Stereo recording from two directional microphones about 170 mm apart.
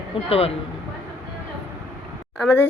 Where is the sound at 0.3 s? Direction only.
35° left (ahead or behind).